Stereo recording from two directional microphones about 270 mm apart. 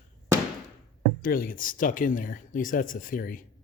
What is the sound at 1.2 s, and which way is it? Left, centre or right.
Speech, left.